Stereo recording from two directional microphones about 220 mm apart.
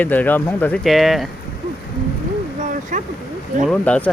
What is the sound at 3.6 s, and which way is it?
Speech, 5° left (ahead or behind).